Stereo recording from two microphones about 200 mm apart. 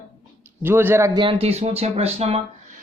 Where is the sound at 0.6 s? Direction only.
10° right (ahead or behind); by 2.4 s 30° right (ahead or behind).